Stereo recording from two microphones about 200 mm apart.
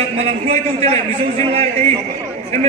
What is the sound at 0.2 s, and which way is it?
A man's voice, 30° right (ahead or behind).